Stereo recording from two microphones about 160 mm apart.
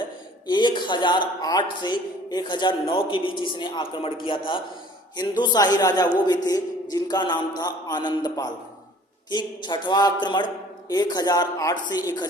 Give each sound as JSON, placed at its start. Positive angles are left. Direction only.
{"t": 0.4, "sound": "a man's voice", "side_deg": 30}